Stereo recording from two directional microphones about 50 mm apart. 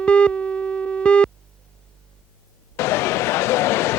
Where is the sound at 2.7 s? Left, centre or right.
Left.